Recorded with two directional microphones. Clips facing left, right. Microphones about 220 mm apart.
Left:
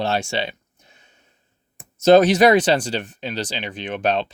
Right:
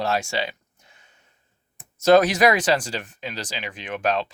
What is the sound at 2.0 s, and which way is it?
Speech, 25° left (ahead or behind).